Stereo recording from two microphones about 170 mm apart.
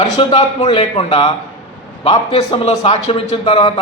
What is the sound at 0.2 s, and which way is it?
Speech, 30° left (ahead or behind).